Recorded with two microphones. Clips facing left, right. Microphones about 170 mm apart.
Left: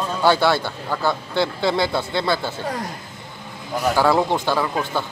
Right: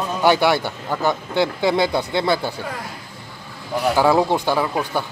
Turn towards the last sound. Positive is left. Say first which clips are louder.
# right 1 dB
turn(degrees=-15)  # may be behind; listen again after turning